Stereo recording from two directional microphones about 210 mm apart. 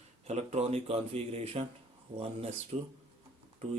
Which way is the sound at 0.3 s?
30° right (ahead or behind).